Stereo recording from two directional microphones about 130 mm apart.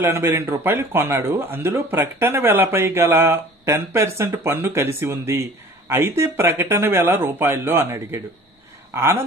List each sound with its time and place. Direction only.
0.0 s a man's voice: 20° right (ahead or behind)